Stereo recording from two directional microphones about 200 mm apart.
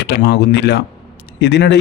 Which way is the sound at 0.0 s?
55° left (ahead or behind).